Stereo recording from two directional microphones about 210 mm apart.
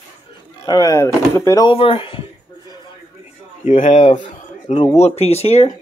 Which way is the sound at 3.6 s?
35° left (ahead or behind).